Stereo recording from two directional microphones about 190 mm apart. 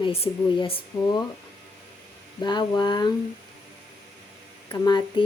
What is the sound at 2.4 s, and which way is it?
Speech, 20° left (ahead or behind).